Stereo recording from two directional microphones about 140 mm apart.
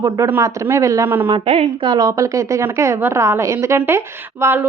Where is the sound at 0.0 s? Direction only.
20° right (ahead or behind).